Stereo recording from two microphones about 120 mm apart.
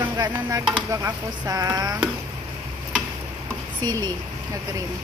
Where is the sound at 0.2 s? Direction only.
30° right (ahead or behind).